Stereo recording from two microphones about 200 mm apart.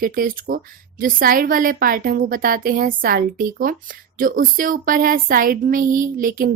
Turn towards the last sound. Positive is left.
turn(degrees=-45)  # may be behind; listen again after turning